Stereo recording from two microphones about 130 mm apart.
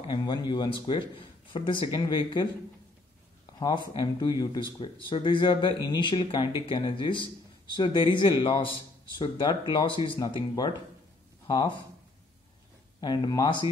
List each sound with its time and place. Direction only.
0.2 s speech: 35° left (ahead or behind)
3.5 s speech: 35° left (ahead or behind)
13.0 s speech: 35° left (ahead or behind)